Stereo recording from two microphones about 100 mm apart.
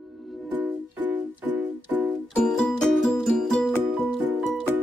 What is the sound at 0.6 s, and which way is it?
Music, 20° right (ahead or behind).